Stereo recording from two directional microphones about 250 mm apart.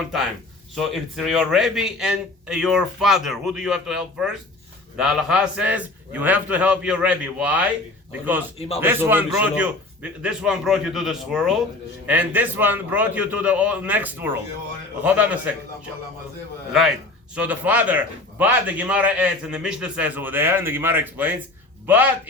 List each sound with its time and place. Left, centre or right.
0.8 s a man's voice: centre
8.5 s speech: left
8.8 s a man's voice: centre
17.3 s a man's voice: centre